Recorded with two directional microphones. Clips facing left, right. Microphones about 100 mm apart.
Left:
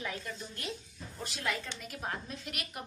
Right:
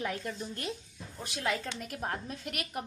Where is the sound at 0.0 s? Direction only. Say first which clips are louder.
Right 4 dB; 45° right (ahead or behind).